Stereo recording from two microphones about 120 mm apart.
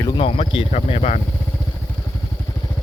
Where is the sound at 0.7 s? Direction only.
70° left (ahead or behind).